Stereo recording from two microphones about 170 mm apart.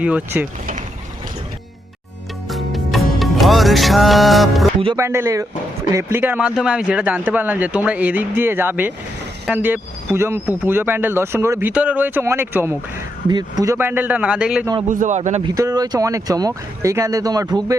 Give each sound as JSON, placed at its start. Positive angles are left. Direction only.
{"t": 0.0, "sound": "speech", "side_deg": -10}
{"t": 2.5, "sound": "music", "side_deg": 0}
{"t": 4.9, "sound": "speech", "side_deg": -15}
{"t": 13.2, "sound": "speech", "side_deg": -25}
{"t": 14.8, "sound": "a man's voice", "side_deg": -50}
{"t": 15.4, "sound": "speech", "side_deg": -20}